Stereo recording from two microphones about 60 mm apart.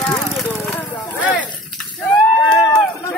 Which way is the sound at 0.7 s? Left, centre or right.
Left.